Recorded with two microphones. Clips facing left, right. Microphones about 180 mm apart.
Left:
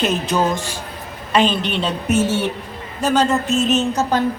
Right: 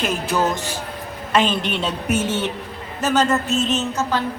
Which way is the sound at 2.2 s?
10° left (ahead or behind).